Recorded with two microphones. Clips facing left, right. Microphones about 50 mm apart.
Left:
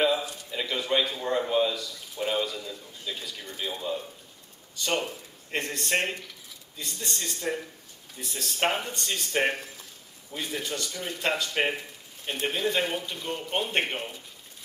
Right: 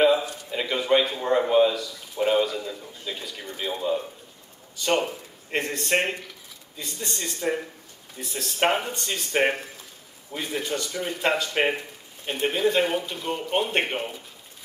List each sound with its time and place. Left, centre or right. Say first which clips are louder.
0.0 s a man's voice: right 5 dB; centre
5.9 s speech: right 3 dB; centre
6.8 s speech: right 2 dB; centre